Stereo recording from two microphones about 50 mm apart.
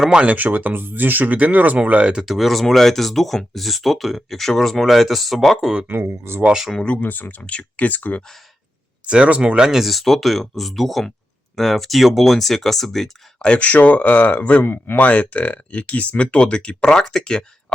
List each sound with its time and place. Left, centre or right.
0.1 s speech: centre
0.3 s speech: right
2.2 s speech: centre
5.9 s speech: right
7.0 s speech: left
9.0 s speech: right
9.8 s speech: centre
13.4 s speech: left
15.0 s speech: left